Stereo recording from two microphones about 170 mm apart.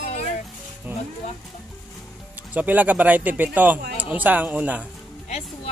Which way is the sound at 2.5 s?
10° right (ahead or behind).